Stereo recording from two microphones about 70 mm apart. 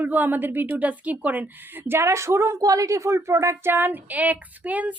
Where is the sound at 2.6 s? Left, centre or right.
Right.